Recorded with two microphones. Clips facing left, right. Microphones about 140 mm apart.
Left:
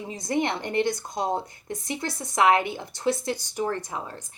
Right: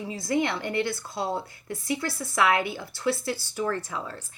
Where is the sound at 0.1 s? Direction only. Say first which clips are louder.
Even; 20° left (ahead or behind).